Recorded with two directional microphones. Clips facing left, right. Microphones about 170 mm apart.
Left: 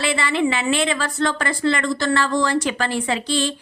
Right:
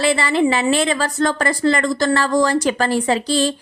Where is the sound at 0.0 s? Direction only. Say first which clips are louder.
Right 4 dB; 40° right (ahead or behind).